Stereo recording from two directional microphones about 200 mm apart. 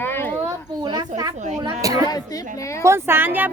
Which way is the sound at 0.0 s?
10° left (ahead or behind).